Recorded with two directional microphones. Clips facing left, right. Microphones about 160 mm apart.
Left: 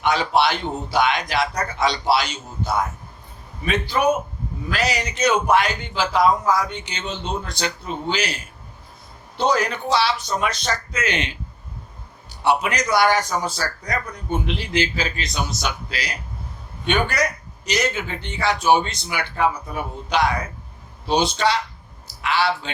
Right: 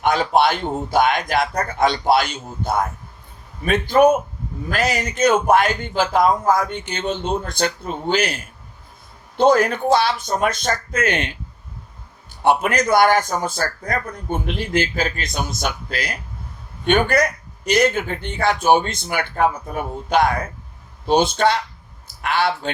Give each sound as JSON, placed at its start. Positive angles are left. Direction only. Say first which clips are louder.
{"t": 0.0, "sound": "a man's voice", "louder": "right 2 dB", "side_deg": -50}
{"t": 12.4, "sound": "a man's voice", "louder": "right 3 dB", "side_deg": -50}